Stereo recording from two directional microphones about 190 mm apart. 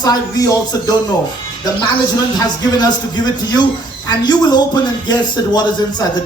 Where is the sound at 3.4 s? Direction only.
20° left (ahead or behind).